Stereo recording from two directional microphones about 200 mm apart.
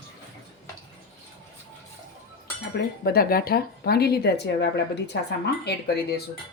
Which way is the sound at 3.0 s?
50° left (ahead or behind).